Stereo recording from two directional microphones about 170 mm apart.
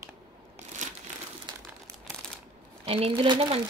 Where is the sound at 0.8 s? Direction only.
45° right (ahead or behind).